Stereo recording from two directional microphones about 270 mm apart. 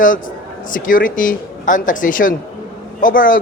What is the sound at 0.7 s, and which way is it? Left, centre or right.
A man's voice, left.